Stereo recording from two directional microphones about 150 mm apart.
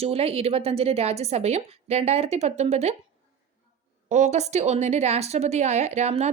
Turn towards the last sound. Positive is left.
turn(degrees=-45)  # may be behind; listen again after turning